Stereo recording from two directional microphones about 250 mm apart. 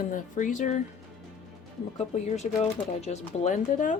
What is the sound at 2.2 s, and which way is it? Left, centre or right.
Speech, left.